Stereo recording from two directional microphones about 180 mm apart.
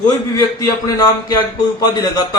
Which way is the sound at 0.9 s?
20° left (ahead or behind).